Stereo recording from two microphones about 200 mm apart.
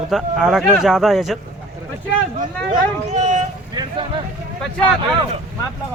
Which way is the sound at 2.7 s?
35° right (ahead or behind).